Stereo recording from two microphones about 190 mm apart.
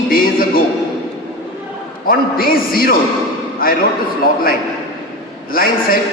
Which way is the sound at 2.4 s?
50° left (ahead or behind).